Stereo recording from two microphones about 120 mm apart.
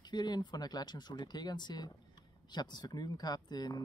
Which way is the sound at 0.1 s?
35° left (ahead or behind).